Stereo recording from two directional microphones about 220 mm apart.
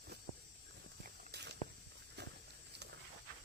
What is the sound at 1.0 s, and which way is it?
Walk, 50° right (ahead or behind).